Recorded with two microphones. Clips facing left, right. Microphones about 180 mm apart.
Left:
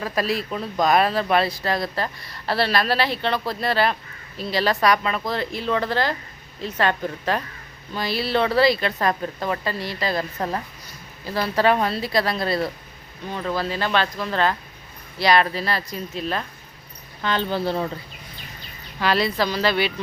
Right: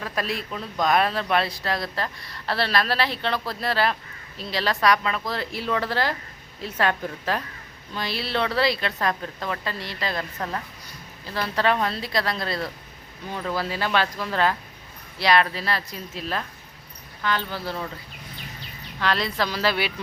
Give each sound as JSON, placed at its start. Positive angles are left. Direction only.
{"t": 0.0, "sound": "speech", "side_deg": 5}
{"t": 11.3, "sound": "speech", "side_deg": 5}
{"t": 13.3, "sound": "speech", "side_deg": -10}
{"t": 17.2, "sound": "speech", "side_deg": 25}
{"t": 18.9, "sound": "speech", "side_deg": 5}